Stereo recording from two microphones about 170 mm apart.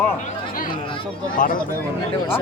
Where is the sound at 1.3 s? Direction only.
55° left (ahead or behind).